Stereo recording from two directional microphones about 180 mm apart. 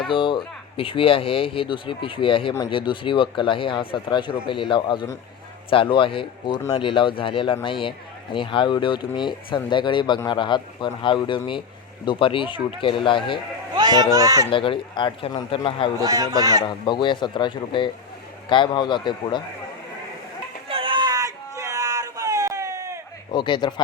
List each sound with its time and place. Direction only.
0.1 s speech: 25° left (ahead or behind)
13.7 s a man's voice: 25° right (ahead or behind)
14.5 s speech: 30° left (ahead or behind)
16.0 s speech: 20° right (ahead or behind)
16.6 s speech: 25° left (ahead or behind)
20.7 s a sound: 30° right (ahead or behind)
23.3 s speech: 25° left (ahead or behind)